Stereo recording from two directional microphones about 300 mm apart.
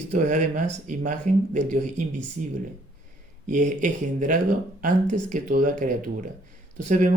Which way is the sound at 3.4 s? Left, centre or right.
Right.